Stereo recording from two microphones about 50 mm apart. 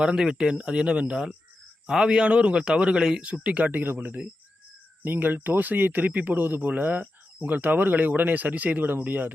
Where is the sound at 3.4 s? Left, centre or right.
Right.